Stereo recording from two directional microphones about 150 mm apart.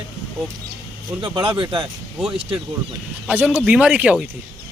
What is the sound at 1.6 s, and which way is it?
Speech, 35° right (ahead or behind).